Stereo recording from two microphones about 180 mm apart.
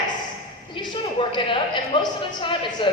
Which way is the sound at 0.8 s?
25° left (ahead or behind).